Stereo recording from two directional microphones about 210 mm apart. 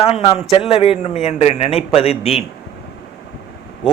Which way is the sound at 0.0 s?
30° left (ahead or behind).